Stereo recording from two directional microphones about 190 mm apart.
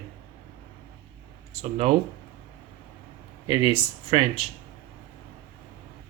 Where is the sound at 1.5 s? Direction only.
35° right (ahead or behind).